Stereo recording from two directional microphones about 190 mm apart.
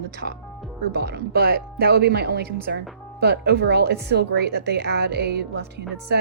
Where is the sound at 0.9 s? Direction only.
60° right (ahead or behind).